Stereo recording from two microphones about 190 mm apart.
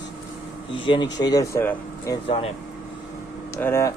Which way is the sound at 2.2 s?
30° left (ahead or behind).